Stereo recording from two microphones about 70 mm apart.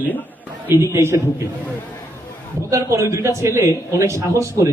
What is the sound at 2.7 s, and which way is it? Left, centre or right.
A man's voice, right.